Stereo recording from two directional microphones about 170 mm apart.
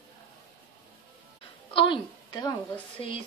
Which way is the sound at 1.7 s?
30° left (ahead or behind).